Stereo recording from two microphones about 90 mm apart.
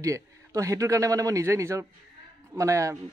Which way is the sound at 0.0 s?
35° right (ahead or behind).